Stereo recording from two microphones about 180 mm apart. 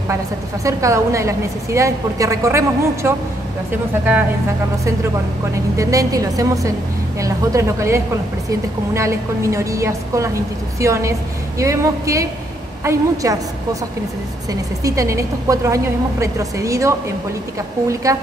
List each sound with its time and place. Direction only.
0.7 s a woman's voice: 15° right (ahead or behind)
5.8 s a woman's voice: 20° right (ahead or behind)
14.5 s a woman's voice: 20° right (ahead or behind)
18.1 s a woman's voice: 15° right (ahead or behind)